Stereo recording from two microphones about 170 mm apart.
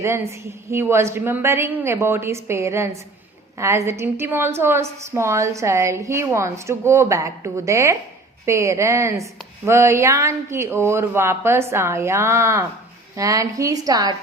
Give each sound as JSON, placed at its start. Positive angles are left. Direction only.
{"t": 0.0, "sound": "a woman's voice", "side_deg": -15}